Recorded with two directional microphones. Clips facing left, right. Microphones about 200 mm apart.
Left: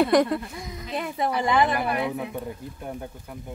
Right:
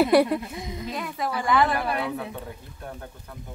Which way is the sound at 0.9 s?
25° left (ahead or behind).